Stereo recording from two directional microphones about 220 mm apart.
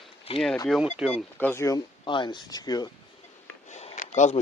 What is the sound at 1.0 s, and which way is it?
Speech, 5° right (ahead or behind).